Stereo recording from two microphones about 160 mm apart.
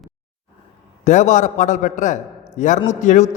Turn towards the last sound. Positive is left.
turn(degrees=50)  # may be behind; listen again after turning